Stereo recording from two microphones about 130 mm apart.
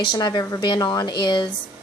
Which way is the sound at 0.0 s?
35° left (ahead or behind).